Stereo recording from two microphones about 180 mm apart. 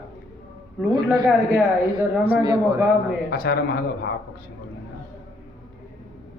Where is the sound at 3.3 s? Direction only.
55° left (ahead or behind).